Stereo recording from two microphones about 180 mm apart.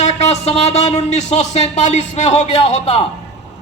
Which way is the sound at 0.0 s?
35° left (ahead or behind).